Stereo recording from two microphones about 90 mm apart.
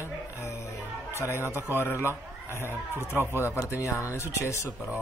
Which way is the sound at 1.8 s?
30° left (ahead or behind).